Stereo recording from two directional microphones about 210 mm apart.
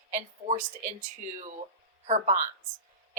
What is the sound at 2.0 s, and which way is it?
Speech, 35° right (ahead or behind).